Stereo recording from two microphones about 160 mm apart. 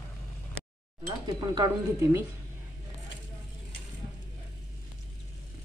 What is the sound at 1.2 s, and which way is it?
Speech, 25° right (ahead or behind).